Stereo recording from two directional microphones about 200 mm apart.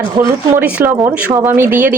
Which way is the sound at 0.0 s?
15° right (ahead or behind).